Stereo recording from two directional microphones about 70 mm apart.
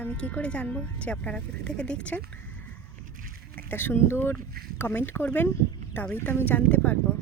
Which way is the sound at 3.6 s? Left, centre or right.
Left.